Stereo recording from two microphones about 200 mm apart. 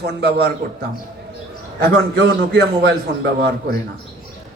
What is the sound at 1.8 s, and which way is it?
A man's voice, 55° right (ahead or behind).